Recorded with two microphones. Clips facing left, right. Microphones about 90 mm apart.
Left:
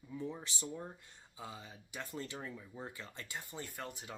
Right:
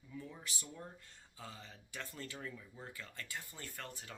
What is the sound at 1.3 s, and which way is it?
Speech, 15° left (ahead or behind).